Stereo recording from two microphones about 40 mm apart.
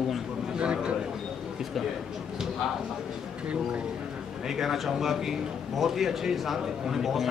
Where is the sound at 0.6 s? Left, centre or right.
Right.